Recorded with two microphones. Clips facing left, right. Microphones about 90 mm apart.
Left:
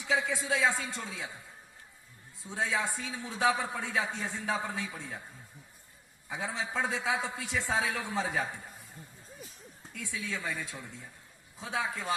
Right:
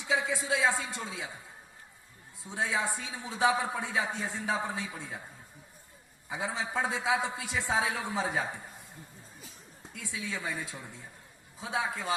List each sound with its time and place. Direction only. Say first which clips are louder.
0.1 s a man's voice: even; 20° right (ahead or behind)
2.4 s a man's voice: right 1 dB; 20° right (ahead or behind)
6.2 s a man's voice: right 1 dB; 15° right (ahead or behind)
9.9 s a man's voice: even; 20° right (ahead or behind)